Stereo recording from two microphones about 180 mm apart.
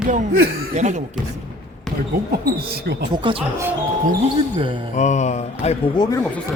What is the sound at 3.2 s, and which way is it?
Speech, 30° right (ahead or behind).